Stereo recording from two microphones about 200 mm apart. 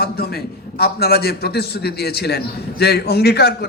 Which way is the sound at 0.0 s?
50° left (ahead or behind).